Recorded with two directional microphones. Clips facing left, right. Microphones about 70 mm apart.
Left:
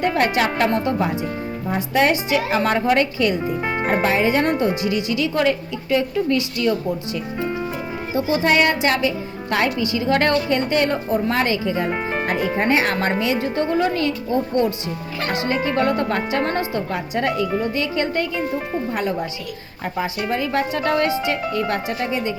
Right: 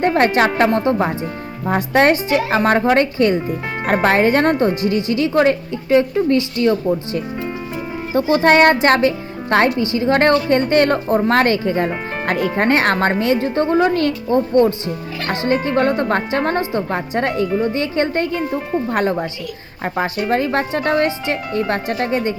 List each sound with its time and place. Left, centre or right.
0.0 s speech: right
1.6 s speech: right
2.0 s speech: right
3.8 s speech: right
8.1 s speech: right
10.8 s speech: right
18.9 s speech: right
20.3 s speech: right